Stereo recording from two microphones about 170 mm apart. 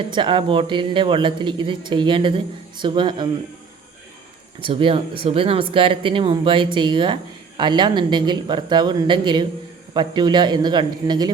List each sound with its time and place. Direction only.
0.1 s speech: 30° right (ahead or behind)
4.6 s speech: 30° right (ahead or behind)